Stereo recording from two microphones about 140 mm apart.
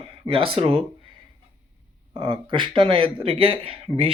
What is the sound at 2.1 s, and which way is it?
Speech, 35° right (ahead or behind).